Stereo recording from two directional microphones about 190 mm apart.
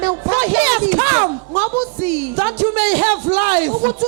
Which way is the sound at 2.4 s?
15° right (ahead or behind).